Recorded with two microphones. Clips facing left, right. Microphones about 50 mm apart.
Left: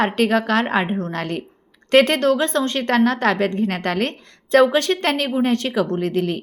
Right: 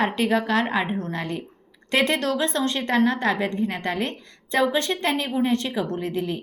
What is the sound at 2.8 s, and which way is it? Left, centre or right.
A woman's voice, left.